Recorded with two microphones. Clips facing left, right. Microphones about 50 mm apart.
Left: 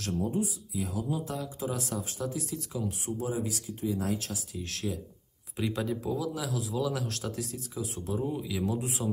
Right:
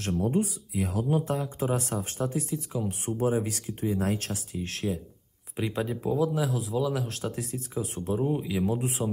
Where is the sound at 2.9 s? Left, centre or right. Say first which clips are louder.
Right 9 dB; right.